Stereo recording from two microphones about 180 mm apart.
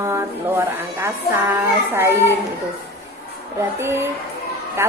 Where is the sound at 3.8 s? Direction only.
15° right (ahead or behind).